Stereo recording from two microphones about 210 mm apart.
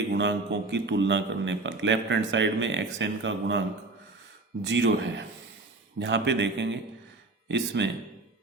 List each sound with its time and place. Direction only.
0.1 s a man's voice: 55° right (ahead or behind)
4.6 s a man's voice: 60° right (ahead or behind)